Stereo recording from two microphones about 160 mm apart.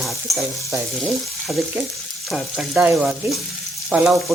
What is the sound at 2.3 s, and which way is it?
Frying, 5° right (ahead or behind).